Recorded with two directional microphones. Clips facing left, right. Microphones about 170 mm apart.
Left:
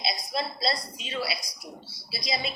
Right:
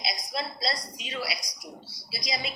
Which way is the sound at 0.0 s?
25° left (ahead or behind).